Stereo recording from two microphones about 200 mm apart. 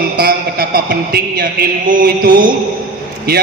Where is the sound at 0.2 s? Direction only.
50° right (ahead or behind).